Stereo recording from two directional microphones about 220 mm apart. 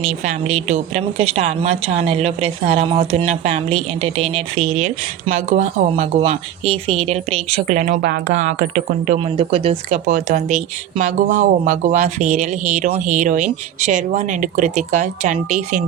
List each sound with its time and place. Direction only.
0.3 s a woman's voice: 30° right (ahead or behind)